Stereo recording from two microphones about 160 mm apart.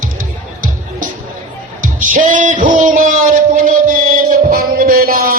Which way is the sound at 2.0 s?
55° right (ahead or behind).